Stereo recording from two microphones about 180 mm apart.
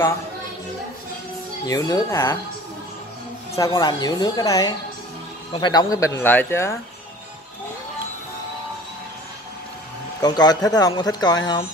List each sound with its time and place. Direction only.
1.7 s speech: 20° left (ahead or behind)
3.5 s speech: 20° left (ahead or behind)
10.2 s speech: 25° left (ahead or behind)